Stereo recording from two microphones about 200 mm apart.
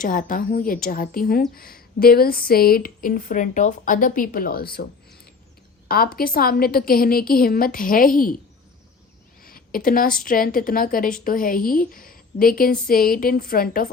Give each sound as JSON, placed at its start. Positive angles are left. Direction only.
{"t": 0.0, "sound": "a woman's voice", "side_deg": 45}
{"t": 9.4, "sound": "a woman's voice", "side_deg": 45}